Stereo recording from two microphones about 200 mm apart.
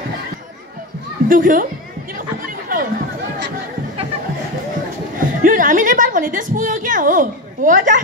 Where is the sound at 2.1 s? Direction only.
45° right (ahead or behind).